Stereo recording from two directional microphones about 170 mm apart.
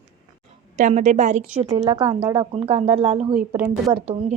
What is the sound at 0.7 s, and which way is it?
A woman's voice, 45° right (ahead or behind).